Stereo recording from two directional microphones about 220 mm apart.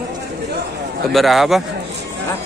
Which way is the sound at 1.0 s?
Centre (ahead or behind).